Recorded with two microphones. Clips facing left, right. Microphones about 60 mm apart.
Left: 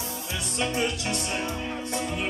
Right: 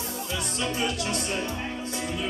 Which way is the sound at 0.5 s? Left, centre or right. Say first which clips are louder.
Left 2 dB; left.